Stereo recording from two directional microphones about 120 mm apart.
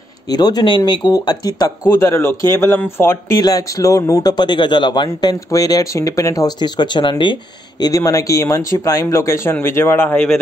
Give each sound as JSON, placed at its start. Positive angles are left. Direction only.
{"t": 0.3, "sound": "speech", "side_deg": 35}
{"t": 7.8, "sound": "speech", "side_deg": 30}